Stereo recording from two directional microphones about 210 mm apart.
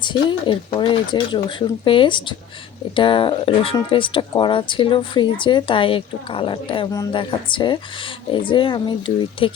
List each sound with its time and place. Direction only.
0.0 s speech: 20° left (ahead or behind)